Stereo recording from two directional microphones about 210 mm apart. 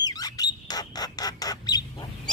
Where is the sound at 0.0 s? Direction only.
15° left (ahead or behind).